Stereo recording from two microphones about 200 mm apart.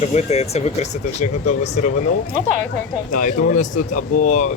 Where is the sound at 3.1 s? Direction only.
40° left (ahead or behind).